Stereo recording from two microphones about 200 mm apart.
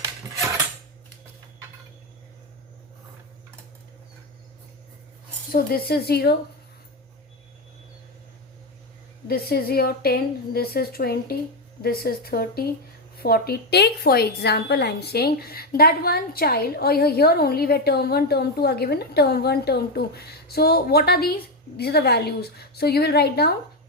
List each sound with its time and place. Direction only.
5.5 s a woman's voice: 50° left (ahead or behind)
9.2 s a woman's voice: 50° left (ahead or behind)